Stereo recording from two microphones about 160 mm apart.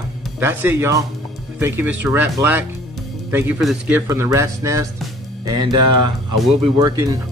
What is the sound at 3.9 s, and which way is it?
Speech, 15° right (ahead or behind).